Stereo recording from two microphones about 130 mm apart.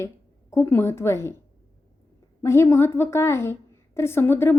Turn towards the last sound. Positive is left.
turn(degrees=20)  # may be behind; listen again after turning